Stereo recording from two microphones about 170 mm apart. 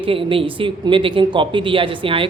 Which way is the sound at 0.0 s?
30° right (ahead or behind).